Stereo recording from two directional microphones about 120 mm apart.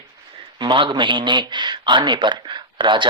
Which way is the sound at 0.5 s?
40° right (ahead or behind).